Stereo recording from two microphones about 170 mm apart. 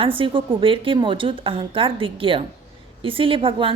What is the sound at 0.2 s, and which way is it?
A woman's voice, 30° right (ahead or behind).